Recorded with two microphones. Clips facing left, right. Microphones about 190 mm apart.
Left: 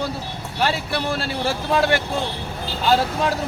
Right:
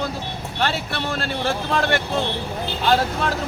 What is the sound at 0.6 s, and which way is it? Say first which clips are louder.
Speech: left 2 dB; 10° left (ahead or behind).